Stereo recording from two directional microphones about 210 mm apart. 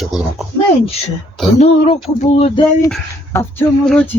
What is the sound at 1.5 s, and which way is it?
Speech, 30° left (ahead or behind).